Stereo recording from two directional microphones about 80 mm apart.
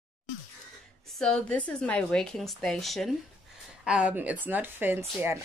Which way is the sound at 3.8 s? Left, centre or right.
Centre.